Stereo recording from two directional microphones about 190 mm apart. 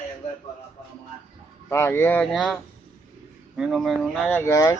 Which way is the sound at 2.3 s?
Centre (ahead or behind).